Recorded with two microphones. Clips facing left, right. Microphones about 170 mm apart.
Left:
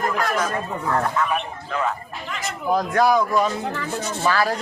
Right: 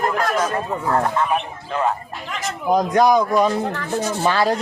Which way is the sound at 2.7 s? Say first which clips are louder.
Right 3 dB; 20° right (ahead or behind).